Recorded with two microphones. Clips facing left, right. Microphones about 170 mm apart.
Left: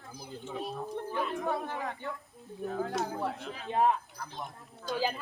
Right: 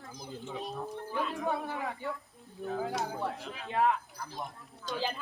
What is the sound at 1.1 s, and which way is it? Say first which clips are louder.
Speech: even; centre (ahead or behind).